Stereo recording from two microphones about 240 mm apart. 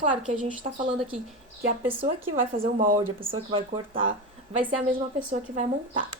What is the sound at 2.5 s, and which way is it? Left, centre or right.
Speech, right.